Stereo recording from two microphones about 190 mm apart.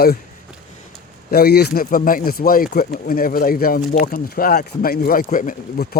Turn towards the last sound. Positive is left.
turn(degrees=45)  # may be behind; listen again after turning